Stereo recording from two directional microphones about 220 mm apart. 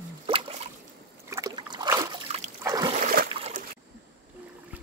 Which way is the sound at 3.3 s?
30° right (ahead or behind).